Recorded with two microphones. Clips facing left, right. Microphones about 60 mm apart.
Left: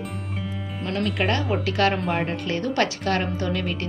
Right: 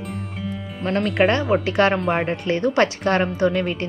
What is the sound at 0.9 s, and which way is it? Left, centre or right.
Speech, right.